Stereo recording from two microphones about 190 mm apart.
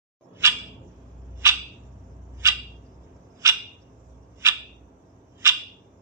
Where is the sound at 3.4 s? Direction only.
15° right (ahead or behind).